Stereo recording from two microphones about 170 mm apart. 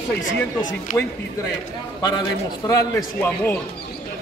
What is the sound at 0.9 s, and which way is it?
Speech, 45° left (ahead or behind).